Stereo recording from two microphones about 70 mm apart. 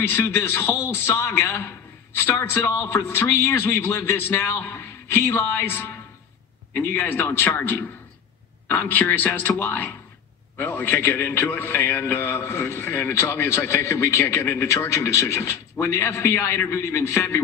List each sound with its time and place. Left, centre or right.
0.0 s a man's voice: left